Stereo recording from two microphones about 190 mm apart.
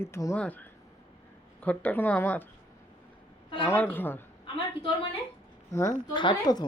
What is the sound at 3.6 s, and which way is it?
Speech, 10° left (ahead or behind).